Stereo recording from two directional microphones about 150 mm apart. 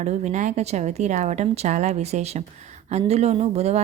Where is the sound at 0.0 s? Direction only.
50° right (ahead or behind).